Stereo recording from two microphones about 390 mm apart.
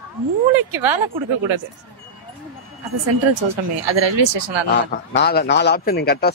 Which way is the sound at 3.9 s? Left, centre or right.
Right.